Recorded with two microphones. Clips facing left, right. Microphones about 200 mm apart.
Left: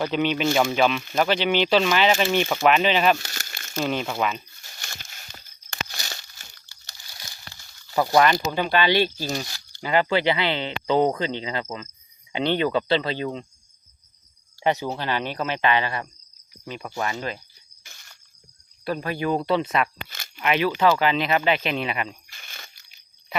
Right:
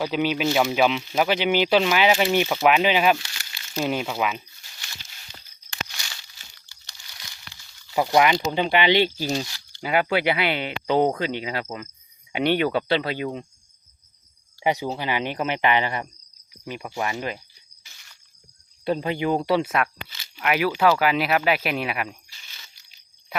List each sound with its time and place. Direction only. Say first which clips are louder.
0.0 s speech: even; 5° right (ahead or behind)
3.2 s crumpling: left 4 dB; 45° left (ahead or behind)
3.8 s speech: even; 10° right (ahead or behind)
4.6 s a sound: left 3 dB; 50° left (ahead or behind)
5.9 s crumpling: left 4 dB; 45° left (ahead or behind)
7.9 s speech: even; 15° right (ahead or behind)
14.6 s speech: even; 15° right (ahead or behind)
17.8 s a sound: left 4 dB; 50° left (ahead or behind)
18.9 s speech: right 2 dB; 20° right (ahead or behind)
20.1 s a sound: left 4 dB; 50° left (ahead or behind)
20.4 s speech: even; 5° right (ahead or behind)
22.3 s crunch: left 6 dB; 55° left (ahead or behind)